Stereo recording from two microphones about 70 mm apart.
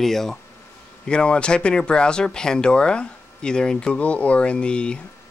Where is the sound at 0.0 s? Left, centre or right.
Centre.